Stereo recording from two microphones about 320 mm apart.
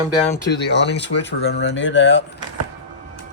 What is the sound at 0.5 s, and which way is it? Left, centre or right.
Speech, left.